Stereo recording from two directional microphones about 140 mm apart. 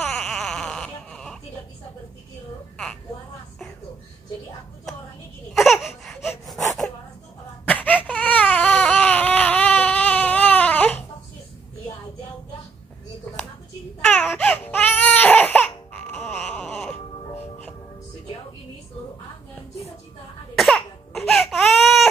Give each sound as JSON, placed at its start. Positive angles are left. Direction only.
{"t": 0.0, "sound": "baby cry", "side_deg": 5}
{"t": 5.5, "sound": "baby cry", "side_deg": 0}
{"t": 7.6, "sound": "baby cry", "side_deg": 10}
{"t": 14.0, "sound": "baby cry", "side_deg": 15}
{"t": 20.5, "sound": "baby cry", "side_deg": 0}